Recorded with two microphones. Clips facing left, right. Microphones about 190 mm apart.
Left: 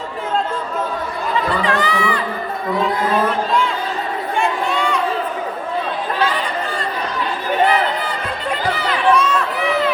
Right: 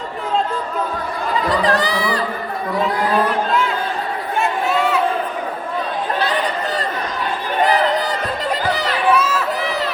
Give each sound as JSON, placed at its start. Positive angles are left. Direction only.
{"t": 1.5, "sound": "speech", "side_deg": -35}
{"t": 4.4, "sound": "a sound", "side_deg": -5}
{"t": 7.6, "sound": "music", "side_deg": -40}
{"t": 9.0, "sound": "run", "side_deg": -5}
{"t": 9.6, "sound": "run", "side_deg": -40}